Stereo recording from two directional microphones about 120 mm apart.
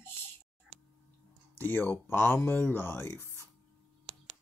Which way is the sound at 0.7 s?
65° right (ahead or behind).